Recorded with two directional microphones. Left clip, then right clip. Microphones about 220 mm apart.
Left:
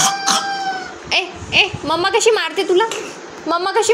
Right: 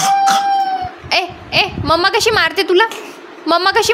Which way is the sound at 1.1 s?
35° right (ahead or behind).